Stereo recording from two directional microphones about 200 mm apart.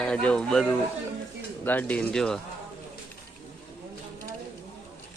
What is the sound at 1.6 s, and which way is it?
Speech, 10° left (ahead or behind).